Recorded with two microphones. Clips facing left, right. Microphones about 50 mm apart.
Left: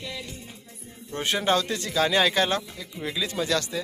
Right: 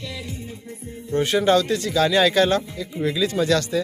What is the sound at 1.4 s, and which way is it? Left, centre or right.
Speech, left.